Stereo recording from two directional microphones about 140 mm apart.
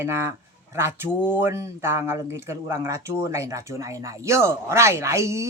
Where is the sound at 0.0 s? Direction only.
15° right (ahead or behind).